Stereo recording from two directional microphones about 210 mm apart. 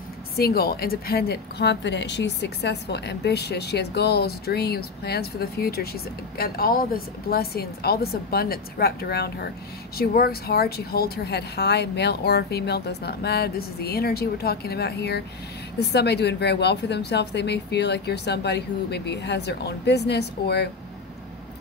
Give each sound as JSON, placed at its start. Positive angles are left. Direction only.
{"t": 0.4, "sound": "a woman's voice", "side_deg": 50}